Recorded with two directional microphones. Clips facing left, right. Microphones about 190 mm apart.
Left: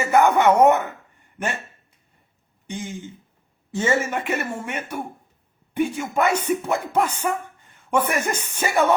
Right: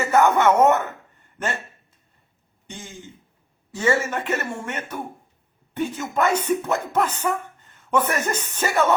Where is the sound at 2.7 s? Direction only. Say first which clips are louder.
Left 7 dB; 15° left (ahead or behind).